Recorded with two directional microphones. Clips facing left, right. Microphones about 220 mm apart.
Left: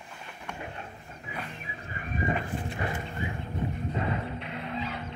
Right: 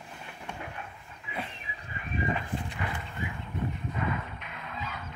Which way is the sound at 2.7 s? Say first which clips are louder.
Left 4 dB; 30° left (ahead or behind).